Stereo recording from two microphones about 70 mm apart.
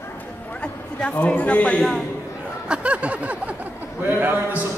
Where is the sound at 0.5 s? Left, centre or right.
Centre.